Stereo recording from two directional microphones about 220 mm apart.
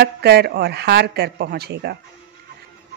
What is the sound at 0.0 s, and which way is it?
A woman's voice, 50° right (ahead or behind).